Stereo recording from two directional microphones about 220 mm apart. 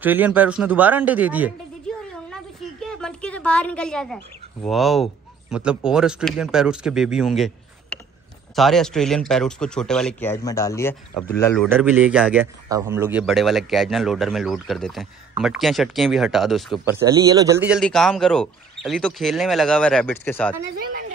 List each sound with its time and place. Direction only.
0.0 s a man's voice: 10° right (ahead or behind)
2.9 s a sound: 5° left (ahead or behind)
4.6 s a man's voice: centre (ahead or behind)
11.7 s a man's voice: 10° right (ahead or behind)
16.8 s a man's voice: 10° right (ahead or behind); by 20.5 s 5° left (ahead or behind)